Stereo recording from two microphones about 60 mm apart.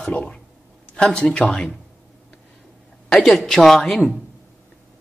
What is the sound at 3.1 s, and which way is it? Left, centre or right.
A woman's voice, centre.